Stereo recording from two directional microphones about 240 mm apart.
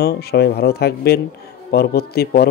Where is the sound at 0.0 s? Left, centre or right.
Left.